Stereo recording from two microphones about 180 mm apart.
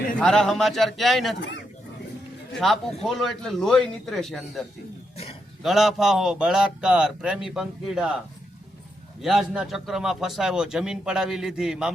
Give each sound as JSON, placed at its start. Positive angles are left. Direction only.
{"t": 0.2, "sound": "a man's voice", "side_deg": 5}
{"t": 1.4, "sound": "a man's voice", "side_deg": 75}
{"t": 2.6, "sound": "a man's voice", "side_deg": 0}
{"t": 5.1, "sound": "a sound", "side_deg": 35}
{"t": 5.6, "sound": "a man's voice", "side_deg": 0}
{"t": 9.2, "sound": "a man's voice", "side_deg": 0}